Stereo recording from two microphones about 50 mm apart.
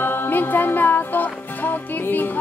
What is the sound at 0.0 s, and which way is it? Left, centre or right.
Music, left.